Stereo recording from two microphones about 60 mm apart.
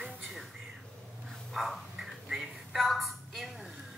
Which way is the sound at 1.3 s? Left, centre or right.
Centre.